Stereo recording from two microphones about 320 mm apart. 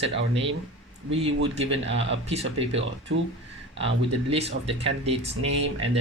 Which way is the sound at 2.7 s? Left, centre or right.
Right.